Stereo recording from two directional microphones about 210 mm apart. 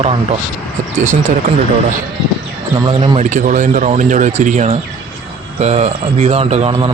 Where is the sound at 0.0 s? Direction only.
30° right (ahead or behind).